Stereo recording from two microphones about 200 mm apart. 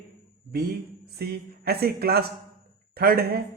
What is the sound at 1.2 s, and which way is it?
A man's voice, 50° right (ahead or behind).